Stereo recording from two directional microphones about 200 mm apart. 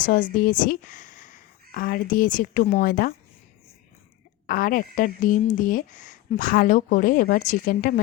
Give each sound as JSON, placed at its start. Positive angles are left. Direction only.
{"t": 0.0, "sound": "speech", "side_deg": 40}
{"t": 4.4, "sound": "speech", "side_deg": 45}